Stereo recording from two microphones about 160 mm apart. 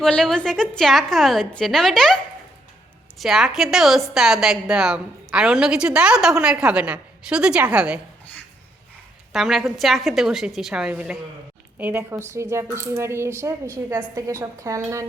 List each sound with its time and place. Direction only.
0.0 s a woman's voice: 5° left (ahead or behind)
3.2 s a woman's voice: centre (ahead or behind)
9.3 s a woman's voice: centre (ahead or behind); by 14.8 s 20° right (ahead or behind)